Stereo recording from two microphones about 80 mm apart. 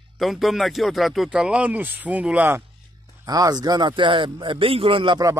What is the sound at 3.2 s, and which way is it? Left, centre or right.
Speech, right.